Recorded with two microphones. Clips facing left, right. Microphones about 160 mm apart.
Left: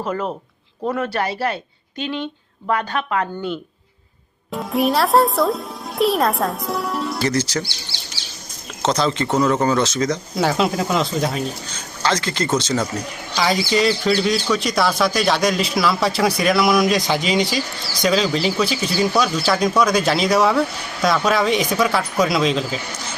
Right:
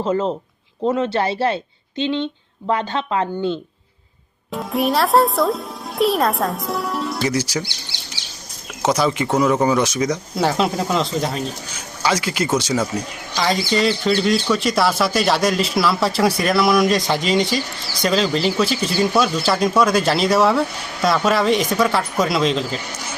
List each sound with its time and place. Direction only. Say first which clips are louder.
0.0 s speech: right 4 dB; 25° right (ahead or behind)
4.5 s speech: left 1 dB; centre (ahead or behind)
7.2 s speech: left 1 dB; 10° right (ahead or behind)
8.8 s speech: right 1 dB; 10° right (ahead or behind)
10.3 s speech: even; centre (ahead or behind)
11.7 s speech: right 2 dB; 10° right (ahead or behind)
13.3 s speech: left 1 dB; centre (ahead or behind)